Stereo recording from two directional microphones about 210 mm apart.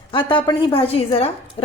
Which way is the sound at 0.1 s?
25° left (ahead or behind).